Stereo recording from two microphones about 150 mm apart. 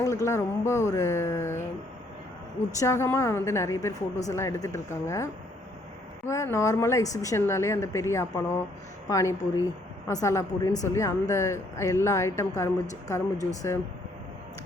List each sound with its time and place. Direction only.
0.0 s a woman's voice: 20° left (ahead or behind)
2.7 s a woman's voice: 20° left (ahead or behind)